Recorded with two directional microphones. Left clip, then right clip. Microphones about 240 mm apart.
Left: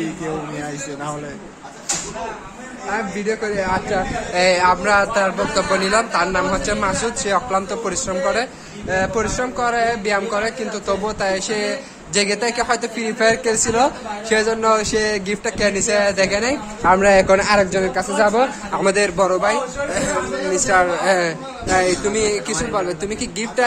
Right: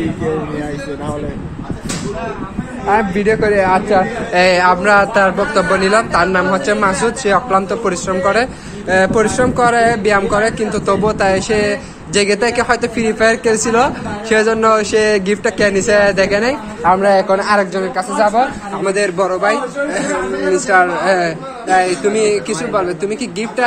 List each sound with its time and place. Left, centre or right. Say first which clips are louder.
2.9 s speech: right 9 dB; centre
17.0 s speech: right 1 dB; left
19.0 s a man's voice: right 3 dB; centre